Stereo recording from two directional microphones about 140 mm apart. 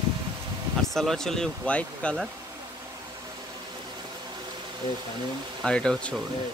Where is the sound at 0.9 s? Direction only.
5° left (ahead or behind).